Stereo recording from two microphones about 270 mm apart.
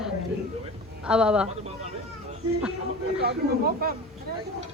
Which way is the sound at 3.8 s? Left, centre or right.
Right.